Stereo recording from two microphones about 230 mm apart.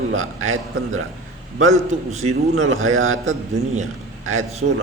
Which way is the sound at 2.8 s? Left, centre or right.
Right.